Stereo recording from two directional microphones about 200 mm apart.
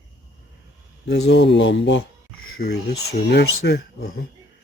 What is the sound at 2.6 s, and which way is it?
Speech, 55° left (ahead or behind).